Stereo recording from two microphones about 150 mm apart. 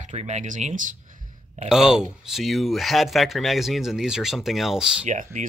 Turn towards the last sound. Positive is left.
turn(degrees=-55)  # may be behind; listen again after turning